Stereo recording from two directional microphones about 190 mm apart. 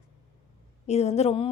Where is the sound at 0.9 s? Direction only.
35° left (ahead or behind).